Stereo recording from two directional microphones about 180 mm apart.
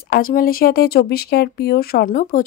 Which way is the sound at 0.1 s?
50° left (ahead or behind).